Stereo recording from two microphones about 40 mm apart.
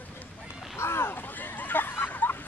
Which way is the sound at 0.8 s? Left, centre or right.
Left.